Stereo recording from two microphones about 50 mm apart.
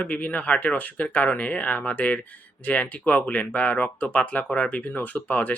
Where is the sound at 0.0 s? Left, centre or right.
Left.